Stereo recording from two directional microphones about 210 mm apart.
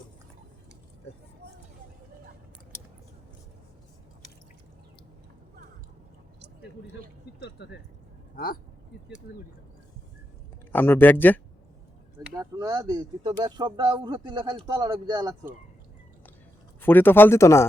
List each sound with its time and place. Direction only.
7.3 s speech: 55° left (ahead or behind)
10.7 s speech: 10° left (ahead or behind)
12.3 s speech: 15° right (ahead or behind)
16.8 s speech: 10° left (ahead or behind)